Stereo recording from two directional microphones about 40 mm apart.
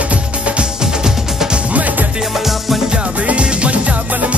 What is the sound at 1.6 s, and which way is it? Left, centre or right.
Music, right.